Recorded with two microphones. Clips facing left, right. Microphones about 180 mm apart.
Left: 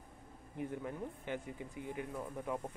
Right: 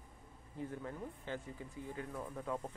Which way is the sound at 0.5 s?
15° left (ahead or behind).